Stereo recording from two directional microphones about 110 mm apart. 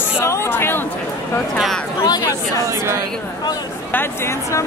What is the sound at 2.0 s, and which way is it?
Speech, 35° left (ahead or behind).